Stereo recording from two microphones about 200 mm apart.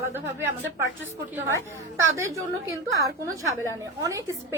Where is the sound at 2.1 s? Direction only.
15° right (ahead or behind).